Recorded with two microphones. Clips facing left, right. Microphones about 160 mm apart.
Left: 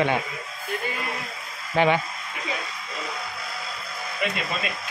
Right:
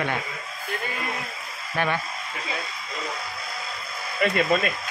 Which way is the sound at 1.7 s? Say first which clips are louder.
Left 5 dB; 20° left (ahead or behind).